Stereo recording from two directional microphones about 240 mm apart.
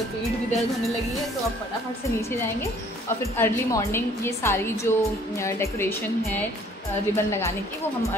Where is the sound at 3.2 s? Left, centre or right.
Centre.